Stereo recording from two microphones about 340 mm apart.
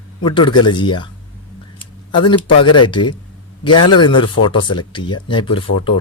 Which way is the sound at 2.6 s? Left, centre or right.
Centre.